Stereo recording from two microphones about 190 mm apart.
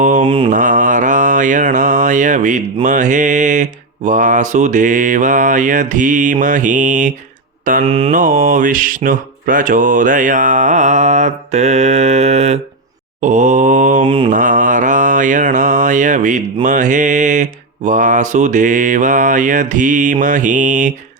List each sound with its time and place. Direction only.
0.0 s mantra: 40° right (ahead or behind)
0.3 s mantra: 25° right (ahead or behind)
0.5 s mantra: 45° right (ahead or behind)
7.6 s speech: 45° right (ahead or behind)
7.9 s mantra: 30° right (ahead or behind)
8.1 s mantra: 45° right (ahead or behind)
14.0 s mantra: 25° right (ahead or behind)
14.3 s mantra: 45° right (ahead or behind)